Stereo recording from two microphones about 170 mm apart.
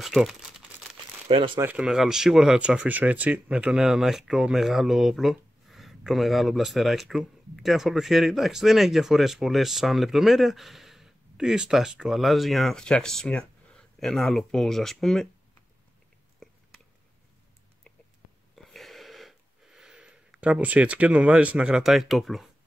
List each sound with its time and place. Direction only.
0.0 s speech: centre (ahead or behind)
1.2 s speech: 30° right (ahead or behind)
1.6 s speech: 10° right (ahead or behind)
18.6 s a sound: centre (ahead or behind)